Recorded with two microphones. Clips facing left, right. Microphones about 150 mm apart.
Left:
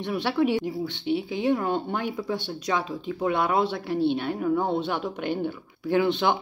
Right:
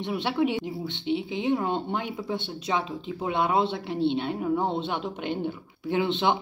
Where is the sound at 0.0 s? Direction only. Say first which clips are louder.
Left 1 dB; 20° right (ahead or behind).